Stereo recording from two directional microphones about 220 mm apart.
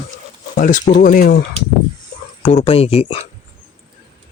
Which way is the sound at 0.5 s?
35° left (ahead or behind).